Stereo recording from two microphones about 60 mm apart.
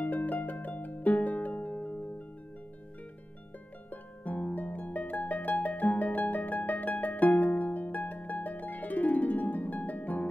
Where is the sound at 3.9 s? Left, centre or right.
Left.